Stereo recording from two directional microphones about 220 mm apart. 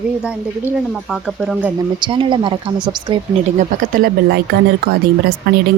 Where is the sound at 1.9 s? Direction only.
20° right (ahead or behind).